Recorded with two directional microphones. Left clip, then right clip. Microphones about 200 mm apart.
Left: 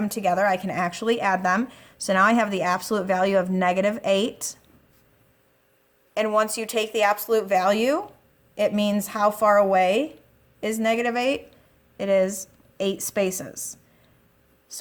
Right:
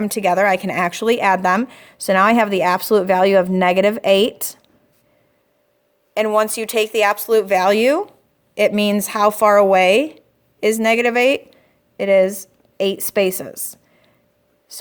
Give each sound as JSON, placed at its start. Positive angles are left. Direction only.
{"t": 0.0, "sound": "speech", "side_deg": -40}
{"t": 6.1, "sound": "speech", "side_deg": -35}
{"t": 14.7, "sound": "whispering", "side_deg": -30}